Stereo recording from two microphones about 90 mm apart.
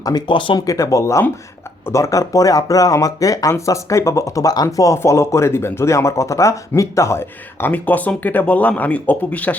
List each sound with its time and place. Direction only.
0.3 s speech: 65° left (ahead or behind)
0.6 s speech: 35° left (ahead or behind); by 9.6 s 15° left (ahead or behind)